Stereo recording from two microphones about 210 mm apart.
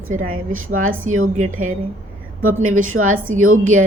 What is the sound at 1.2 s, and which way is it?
Speech, 35° right (ahead or behind).